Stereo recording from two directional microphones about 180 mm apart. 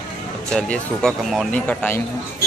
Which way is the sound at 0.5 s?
5° left (ahead or behind).